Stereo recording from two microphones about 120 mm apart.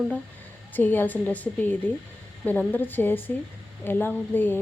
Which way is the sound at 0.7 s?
15° left (ahead or behind).